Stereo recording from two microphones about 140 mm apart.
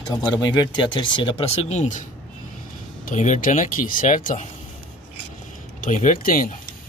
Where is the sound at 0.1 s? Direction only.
30° left (ahead or behind); by 2.0 s 60° left (ahead or behind).